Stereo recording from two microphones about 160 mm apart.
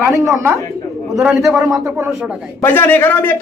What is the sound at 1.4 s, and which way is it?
Speech, 20° right (ahead or behind).